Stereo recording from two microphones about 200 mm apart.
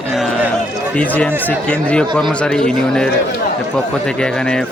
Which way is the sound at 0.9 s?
5° left (ahead or behind).